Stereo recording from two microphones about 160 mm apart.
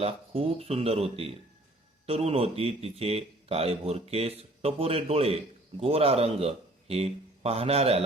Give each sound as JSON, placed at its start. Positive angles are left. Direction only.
{"t": 0.0, "sound": "speech", "side_deg": -40}